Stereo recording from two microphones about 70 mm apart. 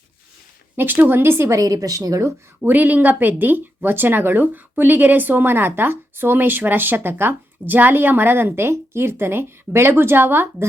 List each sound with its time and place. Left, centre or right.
0.8 s a woman's voice: right
1.5 s speech: right
2.6 s a woman's voice: right